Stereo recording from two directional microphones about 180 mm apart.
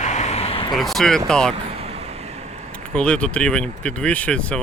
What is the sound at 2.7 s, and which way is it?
Speech, 5° left (ahead or behind).